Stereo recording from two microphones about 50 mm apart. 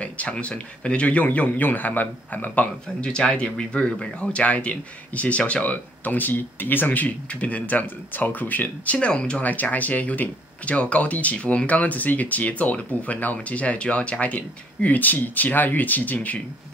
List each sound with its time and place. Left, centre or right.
0.0 s speech: left
3.1 s speech: left
9.4 s speech: left